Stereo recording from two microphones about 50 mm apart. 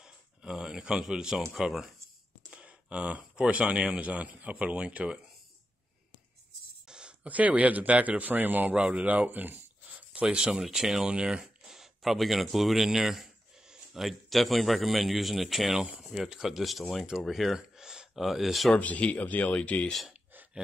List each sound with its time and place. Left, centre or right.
0.0 s a sound: centre
1.1 s speech: centre
2.5 s speech: right
6.9 s a sound: centre
7.2 s a man's voice: right
8.7 s speech: right
10.2 s speech: centre
10.5 s speech: centre
18.8 s speech: left